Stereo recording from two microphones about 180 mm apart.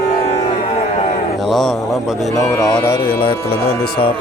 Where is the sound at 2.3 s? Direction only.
15° left (ahead or behind).